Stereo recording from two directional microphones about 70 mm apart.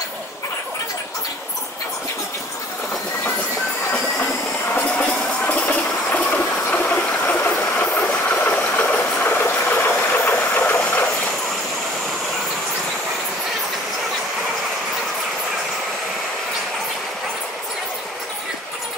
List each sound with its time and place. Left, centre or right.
4.7 s music: left
5.4 s train: left